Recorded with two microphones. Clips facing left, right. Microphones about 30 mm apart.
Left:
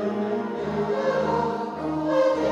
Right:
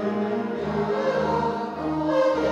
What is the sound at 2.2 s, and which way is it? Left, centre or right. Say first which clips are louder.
Music: left 1 dB; centre.